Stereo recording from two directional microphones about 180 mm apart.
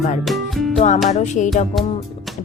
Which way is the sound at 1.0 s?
40° left (ahead or behind).